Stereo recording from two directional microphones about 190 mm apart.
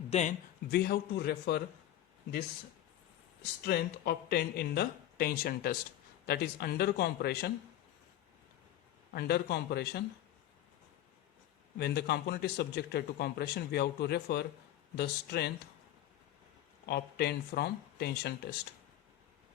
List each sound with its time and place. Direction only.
0.1 s a man's voice: 35° left (ahead or behind)
0.7 s speech: 55° left (ahead or behind)
3.7 s speech: 55° left (ahead or behind)
9.1 s speech: 55° left (ahead or behind)
11.8 s speech: 55° left (ahead or behind)
16.8 s speech: 60° left (ahead or behind)